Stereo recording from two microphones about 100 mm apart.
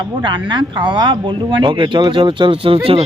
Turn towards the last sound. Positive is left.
turn(degrees=-70)  # may be behind; listen again after turning